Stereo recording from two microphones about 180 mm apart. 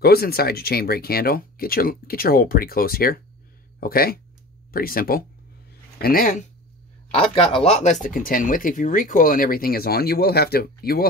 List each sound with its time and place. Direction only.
0.0 s speech: 60° left (ahead or behind)
7.1 s speech: 30° left (ahead or behind); by 11.1 s 55° left (ahead or behind)